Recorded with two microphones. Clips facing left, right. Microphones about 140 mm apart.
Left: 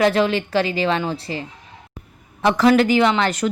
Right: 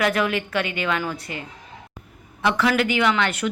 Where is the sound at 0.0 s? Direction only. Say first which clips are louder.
Left 5 dB; 30° left (ahead or behind).